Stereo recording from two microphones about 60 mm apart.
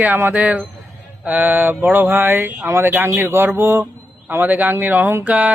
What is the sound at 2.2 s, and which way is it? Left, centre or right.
Speech, right.